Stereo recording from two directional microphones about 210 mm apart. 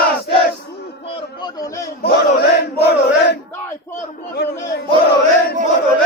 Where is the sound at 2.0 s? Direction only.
50° left (ahead or behind).